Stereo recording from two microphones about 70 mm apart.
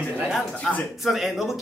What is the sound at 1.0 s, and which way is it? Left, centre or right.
Speech, centre.